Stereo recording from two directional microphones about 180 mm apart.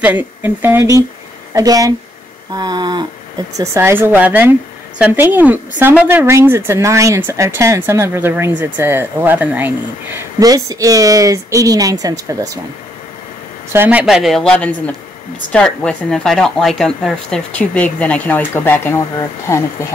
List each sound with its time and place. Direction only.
0.0 s a woman's voice: 10° right (ahead or behind)
10.1 s speech: 20° right (ahead or behind)
13.7 s speech: 10° right (ahead or behind); by 19.6 s 15° left (ahead or behind)